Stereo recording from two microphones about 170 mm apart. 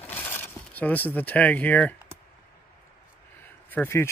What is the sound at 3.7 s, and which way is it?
Speech, 15° left (ahead or behind).